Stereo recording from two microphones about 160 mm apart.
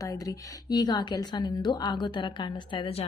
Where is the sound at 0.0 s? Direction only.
25° left (ahead or behind).